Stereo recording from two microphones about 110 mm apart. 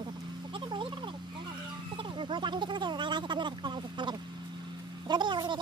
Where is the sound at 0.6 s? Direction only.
45° right (ahead or behind).